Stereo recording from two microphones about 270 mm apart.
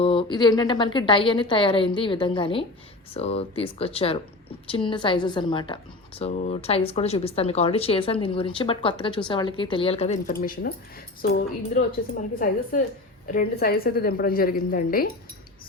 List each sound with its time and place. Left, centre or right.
0.0 s a woman's voice: centre
13.3 s a woman's voice: left